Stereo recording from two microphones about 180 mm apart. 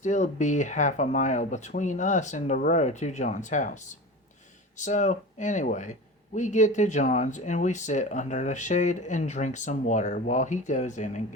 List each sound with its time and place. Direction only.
0.0 s speech: 40° left (ahead or behind)